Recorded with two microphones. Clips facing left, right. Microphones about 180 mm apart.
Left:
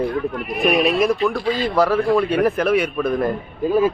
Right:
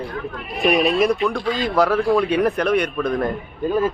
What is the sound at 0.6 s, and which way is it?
Speech, centre (ahead or behind).